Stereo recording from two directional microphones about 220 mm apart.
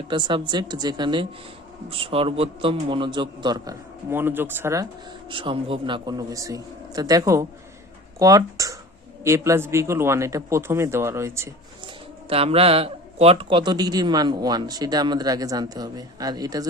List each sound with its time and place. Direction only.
0.1 s a man's voice: 20° right (ahead or behind)
5.3 s a man's voice: 25° right (ahead or behind)
12.3 s a man's voice: 25° right (ahead or behind)